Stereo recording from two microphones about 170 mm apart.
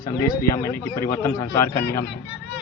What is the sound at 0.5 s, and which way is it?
A man's voice, 20° left (ahead or behind).